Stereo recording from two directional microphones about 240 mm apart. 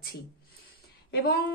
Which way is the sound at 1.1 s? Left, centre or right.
Left.